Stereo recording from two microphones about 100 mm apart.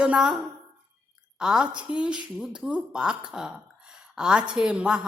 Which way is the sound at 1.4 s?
5° right (ahead or behind).